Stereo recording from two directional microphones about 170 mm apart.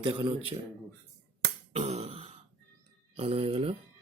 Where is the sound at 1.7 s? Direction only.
40° right (ahead or behind).